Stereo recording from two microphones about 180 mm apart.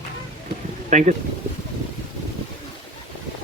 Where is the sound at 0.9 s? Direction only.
45° right (ahead or behind).